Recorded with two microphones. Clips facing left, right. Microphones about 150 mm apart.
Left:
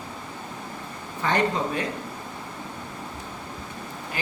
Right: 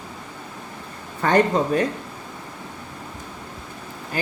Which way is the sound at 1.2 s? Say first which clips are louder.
Right 6 dB; 50° right (ahead or behind).